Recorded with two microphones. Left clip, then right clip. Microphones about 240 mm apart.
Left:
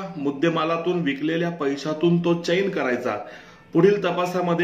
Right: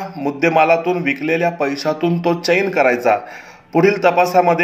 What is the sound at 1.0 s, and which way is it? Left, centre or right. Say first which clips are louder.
Speech: right 7 dB; right.